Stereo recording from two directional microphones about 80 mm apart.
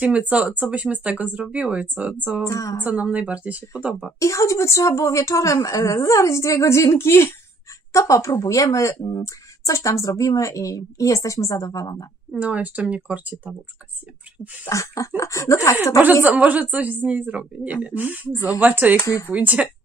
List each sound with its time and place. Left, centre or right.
0.3 s a woman's voice: centre
2.4 s a woman's voice: left
2.8 s a woman's voice: centre
4.2 s a woman's voice: left
12.4 s a woman's voice: centre
14.7 s speech: left
16.3 s a woman's voice: centre